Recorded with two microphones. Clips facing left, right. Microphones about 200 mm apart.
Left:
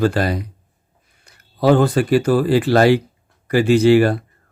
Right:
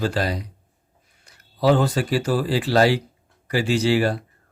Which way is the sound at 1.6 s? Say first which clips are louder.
Left 4 dB; 55° left (ahead or behind).